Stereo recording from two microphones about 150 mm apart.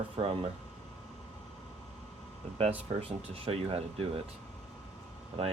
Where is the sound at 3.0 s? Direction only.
40° right (ahead or behind).